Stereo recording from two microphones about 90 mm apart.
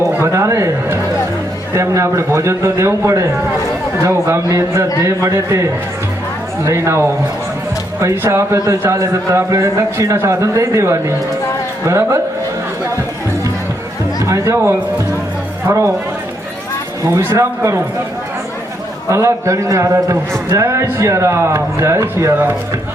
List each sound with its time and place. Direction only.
0.0 s a man's voice: 35° right (ahead or behind)
6.7 s a man's voice: 30° right (ahead or behind)
14.2 s a man's voice: 35° right (ahead or behind)
17.1 s a man's voice: 30° right (ahead or behind)
19.1 s a man's voice: 35° right (ahead or behind)